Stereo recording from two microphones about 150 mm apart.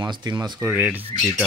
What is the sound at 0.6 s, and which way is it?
Speech, 10° right (ahead or behind).